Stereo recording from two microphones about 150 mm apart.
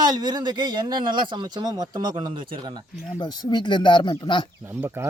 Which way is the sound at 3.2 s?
30° left (ahead or behind).